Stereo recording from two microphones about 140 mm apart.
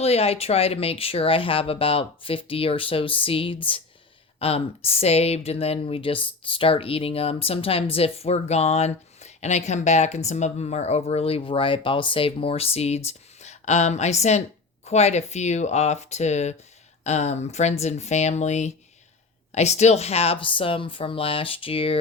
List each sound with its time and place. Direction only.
0.0 s speech: 45° left (ahead or behind)